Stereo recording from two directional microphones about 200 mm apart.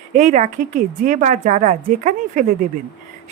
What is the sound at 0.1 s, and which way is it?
A woman's voice, 35° right (ahead or behind).